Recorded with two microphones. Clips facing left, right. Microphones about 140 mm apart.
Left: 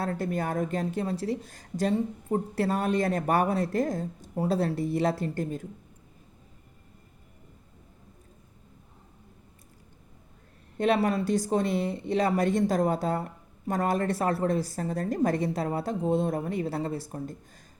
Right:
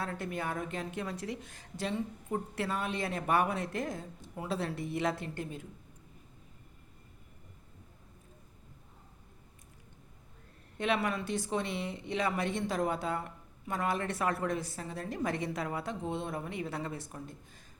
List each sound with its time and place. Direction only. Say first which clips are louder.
0.0 s a woman's voice: left 7 dB; 40° left (ahead or behind)
10.8 s a woman's voice: left 7 dB; 35° left (ahead or behind)